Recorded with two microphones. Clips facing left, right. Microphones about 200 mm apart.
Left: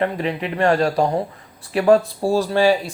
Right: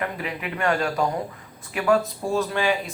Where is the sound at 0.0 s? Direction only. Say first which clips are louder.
Left 7 dB; 30° left (ahead or behind).